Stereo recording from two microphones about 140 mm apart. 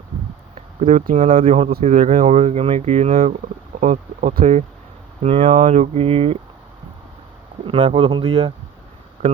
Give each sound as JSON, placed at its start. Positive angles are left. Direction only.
{"t": 0.5, "sound": "a sound", "side_deg": -50}
{"t": 1.4, "sound": "speech", "side_deg": -45}
{"t": 1.8, "sound": "speech", "side_deg": -60}
{"t": 3.8, "sound": "speech", "side_deg": -65}
{"t": 5.2, "sound": "speech", "side_deg": -45}
{"t": 7.7, "sound": "speech", "side_deg": -40}